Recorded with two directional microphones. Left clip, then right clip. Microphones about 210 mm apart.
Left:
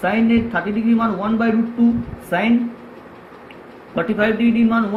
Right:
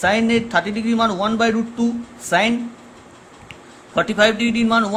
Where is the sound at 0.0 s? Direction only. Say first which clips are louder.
Right 1 dB; 45° right (ahead or behind).